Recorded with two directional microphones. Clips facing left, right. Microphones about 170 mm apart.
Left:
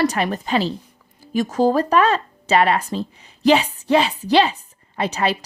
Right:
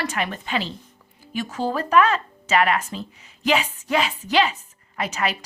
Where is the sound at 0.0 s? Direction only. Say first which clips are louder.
Left 7 dB; 40° left (ahead or behind).